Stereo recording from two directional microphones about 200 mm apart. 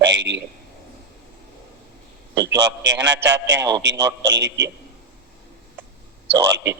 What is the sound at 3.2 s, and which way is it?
Speech, 60° right (ahead or behind).